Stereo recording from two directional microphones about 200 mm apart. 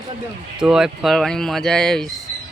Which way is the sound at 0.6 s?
5° right (ahead or behind).